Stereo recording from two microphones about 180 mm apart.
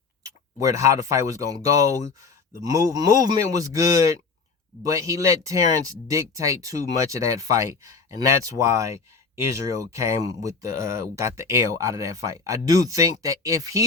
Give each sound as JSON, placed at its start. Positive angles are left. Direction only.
{"t": 0.2, "sound": "a man's voice", "side_deg": -20}